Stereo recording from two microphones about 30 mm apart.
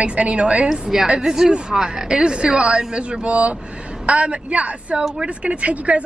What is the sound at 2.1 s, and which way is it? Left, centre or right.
A woman's voice, right.